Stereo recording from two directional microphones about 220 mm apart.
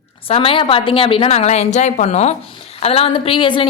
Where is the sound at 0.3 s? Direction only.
25° left (ahead or behind).